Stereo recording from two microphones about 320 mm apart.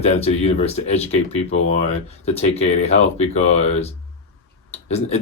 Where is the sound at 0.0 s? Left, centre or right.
Centre.